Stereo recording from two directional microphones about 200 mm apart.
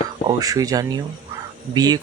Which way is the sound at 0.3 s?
20° right (ahead or behind).